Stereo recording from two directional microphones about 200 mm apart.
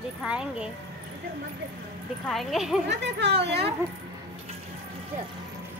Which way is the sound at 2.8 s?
60° right (ahead or behind).